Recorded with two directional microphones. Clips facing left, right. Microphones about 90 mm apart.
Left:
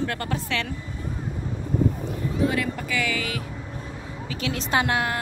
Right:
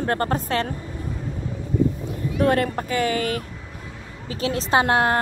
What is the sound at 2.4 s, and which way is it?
Speech, 55° right (ahead or behind).